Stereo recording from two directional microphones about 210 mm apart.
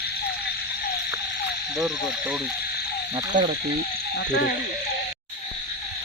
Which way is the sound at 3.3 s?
40° right (ahead or behind).